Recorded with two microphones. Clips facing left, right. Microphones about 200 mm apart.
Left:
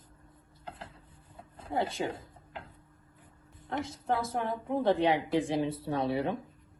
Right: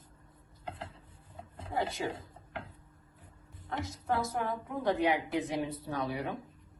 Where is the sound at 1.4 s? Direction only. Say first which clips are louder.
Left 1 dB; 25° right (ahead or behind).